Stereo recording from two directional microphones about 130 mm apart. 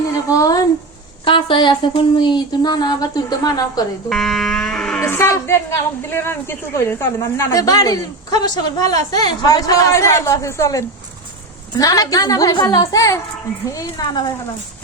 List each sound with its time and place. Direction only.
0.3 s speech: 25° left (ahead or behind)
1.2 s speech: 40° left (ahead or behind)
4.1 s livestock: 5° left (ahead or behind)
4.9 s a woman's voice: 20° left (ahead or behind)